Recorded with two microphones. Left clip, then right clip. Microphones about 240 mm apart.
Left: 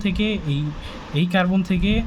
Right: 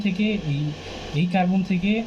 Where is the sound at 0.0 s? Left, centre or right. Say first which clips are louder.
Left 2 dB; left.